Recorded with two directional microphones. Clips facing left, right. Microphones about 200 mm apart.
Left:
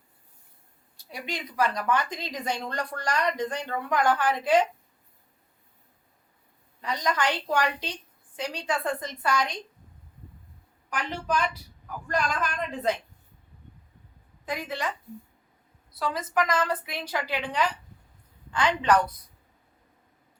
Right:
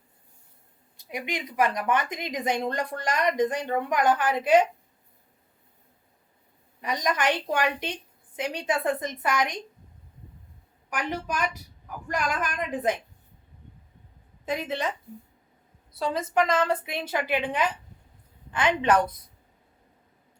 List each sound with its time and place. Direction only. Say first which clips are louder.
0.9 s a woman's voice: right 3 dB; 20° right (ahead or behind)
6.8 s a woman's voice: right 1 dB; 20° right (ahead or behind)
10.8 s a woman's voice: even; 15° right (ahead or behind)
14.4 s a woman's voice: right 3 dB; 25° right (ahead or behind)
16.0 s a woman's voice: right 3 dB; 25° right (ahead or behind)